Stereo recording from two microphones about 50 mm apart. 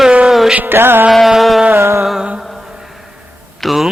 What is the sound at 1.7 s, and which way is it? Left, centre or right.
Music, right.